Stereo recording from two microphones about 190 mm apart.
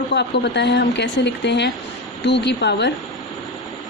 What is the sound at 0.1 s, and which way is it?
A woman's voice, 65° left (ahead or behind).